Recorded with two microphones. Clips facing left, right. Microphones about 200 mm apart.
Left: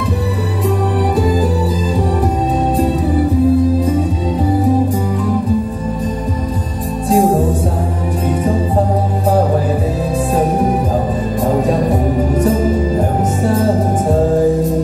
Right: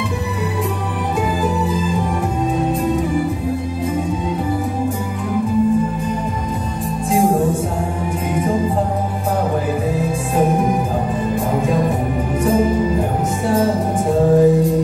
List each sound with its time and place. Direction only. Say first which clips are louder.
7.1 s music: left 4 dB; 35° left (ahead or behind)